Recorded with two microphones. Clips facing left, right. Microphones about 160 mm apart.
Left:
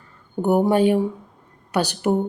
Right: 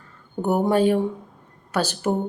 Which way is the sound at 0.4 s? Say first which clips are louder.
Left 2 dB; 15° left (ahead or behind).